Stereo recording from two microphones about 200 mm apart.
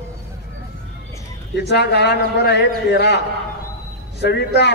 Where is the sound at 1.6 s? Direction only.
55° left (ahead or behind).